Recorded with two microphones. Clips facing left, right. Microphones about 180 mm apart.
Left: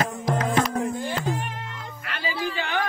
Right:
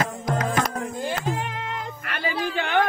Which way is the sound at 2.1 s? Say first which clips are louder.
Right 1 dB; 55° right (ahead or behind).